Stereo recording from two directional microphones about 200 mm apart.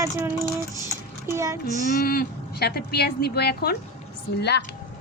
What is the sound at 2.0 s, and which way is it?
A woman's voice, 50° left (ahead or behind).